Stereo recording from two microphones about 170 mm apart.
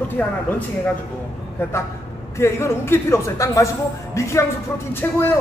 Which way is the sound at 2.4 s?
15° left (ahead or behind).